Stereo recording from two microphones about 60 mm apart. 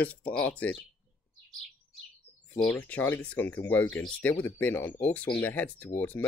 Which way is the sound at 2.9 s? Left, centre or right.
Left.